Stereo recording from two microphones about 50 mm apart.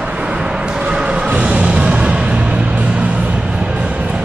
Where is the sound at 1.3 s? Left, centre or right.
Right.